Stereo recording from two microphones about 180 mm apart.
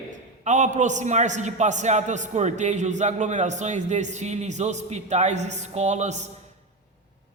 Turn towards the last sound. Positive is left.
turn(degrees=-40)  # may be behind; listen again after turning